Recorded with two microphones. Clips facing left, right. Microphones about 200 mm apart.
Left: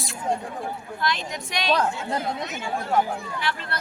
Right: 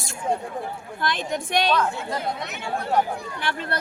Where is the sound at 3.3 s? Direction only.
50° right (ahead or behind).